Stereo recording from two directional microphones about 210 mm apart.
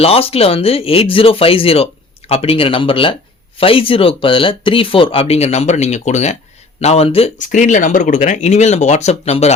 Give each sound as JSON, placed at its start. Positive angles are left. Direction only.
{"t": 0.0, "sound": "speech", "side_deg": 30}